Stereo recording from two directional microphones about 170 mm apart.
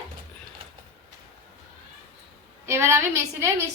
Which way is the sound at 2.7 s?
15° right (ahead or behind).